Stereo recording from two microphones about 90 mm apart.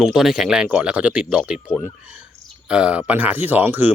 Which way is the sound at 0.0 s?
5° right (ahead or behind).